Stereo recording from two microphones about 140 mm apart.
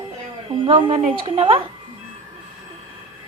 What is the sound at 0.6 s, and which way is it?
A woman's voice, 35° right (ahead or behind).